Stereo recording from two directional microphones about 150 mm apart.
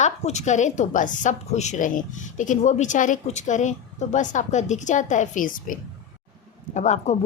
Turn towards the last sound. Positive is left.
turn(degrees=50)  # may be behind; listen again after turning